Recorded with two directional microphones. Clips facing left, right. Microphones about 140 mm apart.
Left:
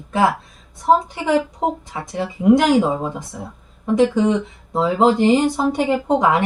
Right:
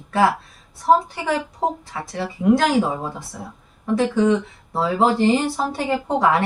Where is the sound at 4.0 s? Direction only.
20° left (ahead or behind).